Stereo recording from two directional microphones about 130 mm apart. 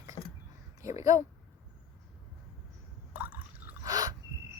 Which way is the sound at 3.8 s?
30° right (ahead or behind).